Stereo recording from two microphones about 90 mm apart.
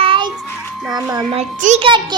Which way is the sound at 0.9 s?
45° right (ahead or behind).